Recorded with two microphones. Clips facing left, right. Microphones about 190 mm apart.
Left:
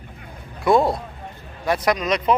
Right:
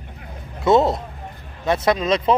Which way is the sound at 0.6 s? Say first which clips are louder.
Right 1 dB; 25° right (ahead or behind).